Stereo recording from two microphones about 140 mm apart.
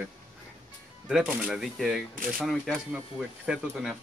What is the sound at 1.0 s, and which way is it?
Speech, 5° right (ahead or behind).